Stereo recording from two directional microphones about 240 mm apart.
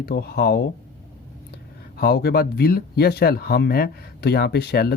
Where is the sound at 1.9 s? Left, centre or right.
Left.